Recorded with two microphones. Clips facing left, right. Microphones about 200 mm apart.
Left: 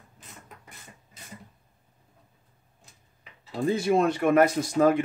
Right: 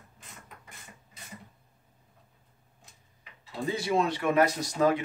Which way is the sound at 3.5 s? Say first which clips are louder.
Left 6 dB; 50° left (ahead or behind).